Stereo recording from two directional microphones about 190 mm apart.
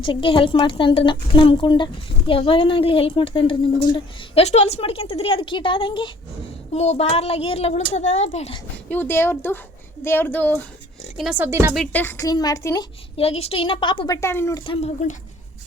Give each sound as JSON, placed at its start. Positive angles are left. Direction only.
{"t": 0.0, "sound": "a woman's voice", "side_deg": 25}
{"t": 8.9, "sound": "a woman's voice", "side_deg": 10}
{"t": 11.2, "sound": "speech", "side_deg": -5}
{"t": 11.7, "sound": "a woman's voice", "side_deg": 5}
{"t": 13.1, "sound": "a woman's voice", "side_deg": 30}
{"t": 14.2, "sound": "a woman's voice", "side_deg": 15}
{"t": 14.6, "sound": "a woman's voice", "side_deg": 25}